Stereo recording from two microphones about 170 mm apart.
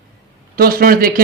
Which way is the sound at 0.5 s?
60° right (ahead or behind).